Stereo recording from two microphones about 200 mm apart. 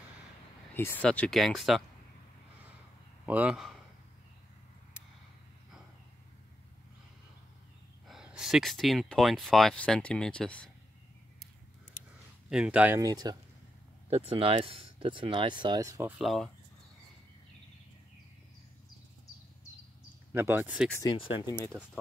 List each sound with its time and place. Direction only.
0.7 s speech: 10° left (ahead or behind)
3.3 s speech: 5° right (ahead or behind)
8.1 s speech: 5° right (ahead or behind)
12.4 s speech: 5° right (ahead or behind)
13.0 s speech: 20° right (ahead or behind)
20.3 s speech: 10° right (ahead or behind)
20.9 s speech: 20° left (ahead or behind)